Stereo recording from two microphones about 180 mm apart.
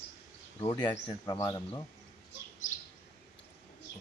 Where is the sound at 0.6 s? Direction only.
25° left (ahead or behind).